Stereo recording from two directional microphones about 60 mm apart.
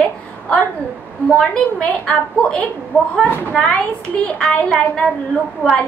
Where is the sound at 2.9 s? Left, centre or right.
Left.